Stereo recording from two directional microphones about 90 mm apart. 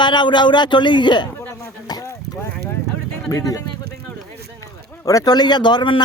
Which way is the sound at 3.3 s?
40° left (ahead or behind).